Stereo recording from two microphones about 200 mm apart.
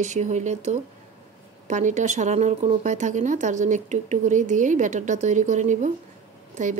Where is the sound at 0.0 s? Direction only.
35° right (ahead or behind).